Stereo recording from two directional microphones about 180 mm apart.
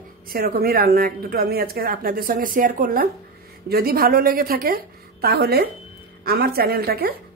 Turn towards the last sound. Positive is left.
turn(degrees=-60)  # may be behind; listen again after turning